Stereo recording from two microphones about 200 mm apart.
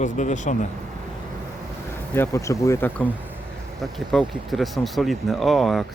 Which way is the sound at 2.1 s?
15° left (ahead or behind).